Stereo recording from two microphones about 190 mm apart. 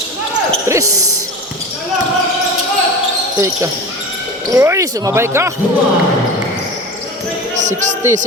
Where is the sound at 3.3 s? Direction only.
15° right (ahead or behind).